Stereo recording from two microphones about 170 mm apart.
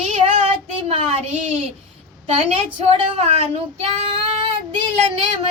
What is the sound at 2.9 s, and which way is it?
Speech, 35° right (ahead or behind).